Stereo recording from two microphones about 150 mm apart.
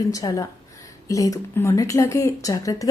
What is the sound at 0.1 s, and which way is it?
Speech, 25° left (ahead or behind).